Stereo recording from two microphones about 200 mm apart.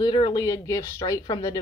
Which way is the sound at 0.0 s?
25° left (ahead or behind).